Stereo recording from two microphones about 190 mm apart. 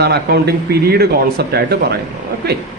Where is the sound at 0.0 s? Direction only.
60° right (ahead or behind).